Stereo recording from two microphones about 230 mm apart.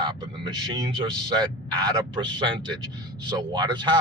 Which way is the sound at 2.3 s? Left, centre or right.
Centre.